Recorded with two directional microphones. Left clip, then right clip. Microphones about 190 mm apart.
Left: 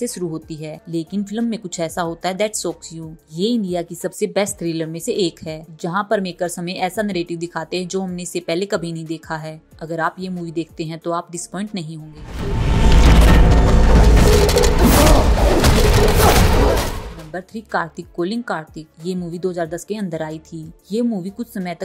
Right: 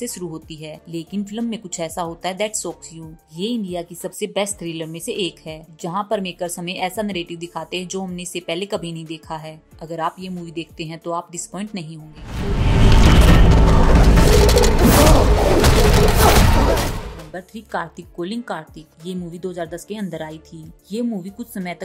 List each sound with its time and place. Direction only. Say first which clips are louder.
0.0 s speech: left 4 dB; 10° left (ahead or behind)
12.9 s music: even; centre (ahead or behind)
17.3 s speech: left 5 dB; 15° left (ahead or behind)